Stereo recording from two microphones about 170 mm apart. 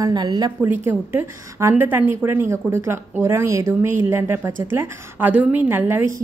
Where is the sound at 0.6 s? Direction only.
10° right (ahead or behind).